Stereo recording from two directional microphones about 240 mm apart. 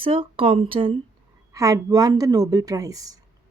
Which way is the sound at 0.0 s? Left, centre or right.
Right.